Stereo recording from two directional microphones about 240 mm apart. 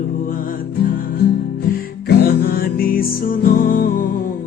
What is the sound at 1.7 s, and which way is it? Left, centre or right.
Music, left.